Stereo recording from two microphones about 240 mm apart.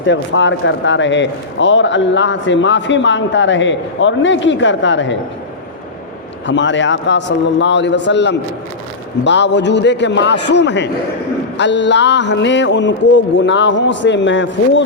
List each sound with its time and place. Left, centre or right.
0.0 s speech: left
6.4 s speech: left